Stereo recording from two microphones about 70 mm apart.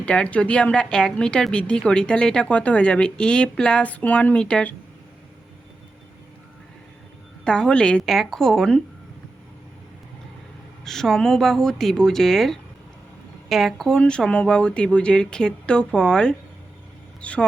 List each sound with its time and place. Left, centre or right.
0.0 s a woman's voice: centre
7.4 s a woman's voice: centre
8.0 s speech: centre
10.8 s a woman's voice: centre